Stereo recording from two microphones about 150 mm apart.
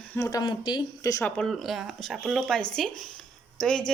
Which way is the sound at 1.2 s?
Centre (ahead or behind).